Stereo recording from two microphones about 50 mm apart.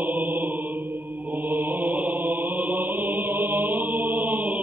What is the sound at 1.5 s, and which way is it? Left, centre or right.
Mantra, right.